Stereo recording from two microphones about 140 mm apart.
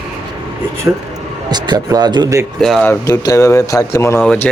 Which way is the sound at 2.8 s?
20° left (ahead or behind).